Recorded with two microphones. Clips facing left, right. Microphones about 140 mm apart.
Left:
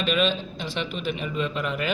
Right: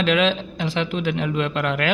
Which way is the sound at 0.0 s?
90° right.